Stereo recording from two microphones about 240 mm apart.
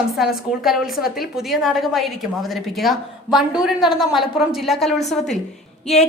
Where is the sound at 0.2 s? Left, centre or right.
Centre.